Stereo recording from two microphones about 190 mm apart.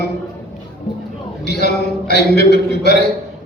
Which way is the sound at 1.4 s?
60° left (ahead or behind).